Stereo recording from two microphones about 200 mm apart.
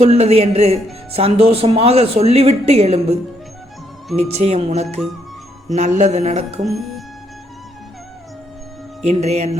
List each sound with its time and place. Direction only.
0.0 s speech: 30° right (ahead or behind)
6.6 s speech: centre (ahead or behind)
9.0 s speech: 30° right (ahead or behind)